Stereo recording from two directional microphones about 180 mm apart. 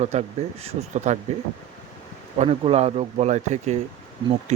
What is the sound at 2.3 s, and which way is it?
Speech, 35° right (ahead or behind).